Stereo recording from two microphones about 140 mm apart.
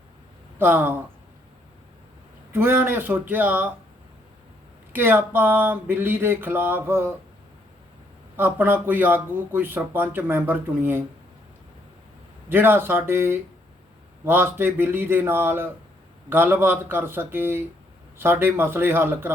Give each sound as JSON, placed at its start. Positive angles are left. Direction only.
{"t": 0.6, "sound": "speech", "side_deg": -15}
{"t": 2.5, "sound": "speech", "side_deg": -15}
{"t": 4.9, "sound": "speech", "side_deg": -15}
{"t": 8.4, "sound": "speech", "side_deg": -15}
{"t": 12.5, "sound": "speech", "side_deg": -15}